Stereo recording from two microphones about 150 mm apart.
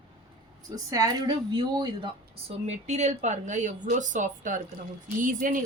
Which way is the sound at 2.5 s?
50° right (ahead or behind).